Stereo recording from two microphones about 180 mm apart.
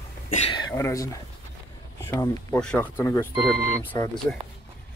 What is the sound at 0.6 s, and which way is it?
Speech, 15° left (ahead or behind).